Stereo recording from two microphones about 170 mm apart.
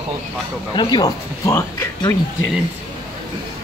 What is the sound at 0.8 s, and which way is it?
Speech, 25° left (ahead or behind).